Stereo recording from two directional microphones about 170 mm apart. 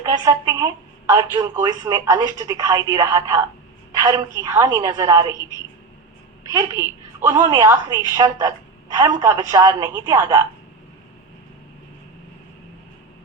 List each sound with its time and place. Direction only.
0.0 s a woman's voice: 20° right (ahead or behind)
6.5 s a woman's voice: 20° right (ahead or behind)